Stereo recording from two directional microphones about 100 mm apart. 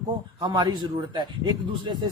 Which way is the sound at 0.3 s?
40° right (ahead or behind).